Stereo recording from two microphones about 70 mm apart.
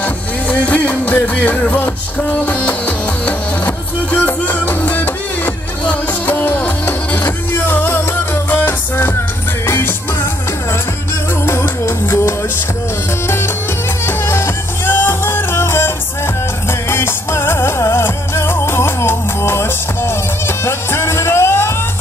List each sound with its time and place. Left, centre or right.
0.0 s music: left
11.4 s music: left
14.0 s music: left
16.9 s music: left